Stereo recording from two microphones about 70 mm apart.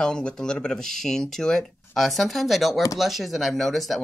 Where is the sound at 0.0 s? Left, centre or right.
Centre.